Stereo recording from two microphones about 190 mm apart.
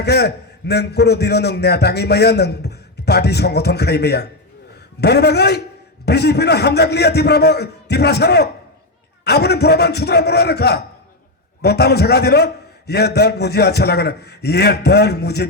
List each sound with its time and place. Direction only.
0.0 s a man's voice: 60° left (ahead or behind)